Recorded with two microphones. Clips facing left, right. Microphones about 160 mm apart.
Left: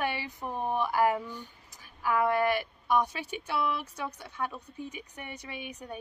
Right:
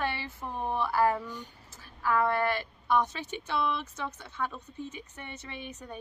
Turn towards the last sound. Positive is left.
turn(degrees=10)  # may be behind; listen again after turning